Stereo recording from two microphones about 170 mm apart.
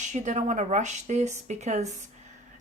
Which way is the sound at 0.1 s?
45° right (ahead or behind).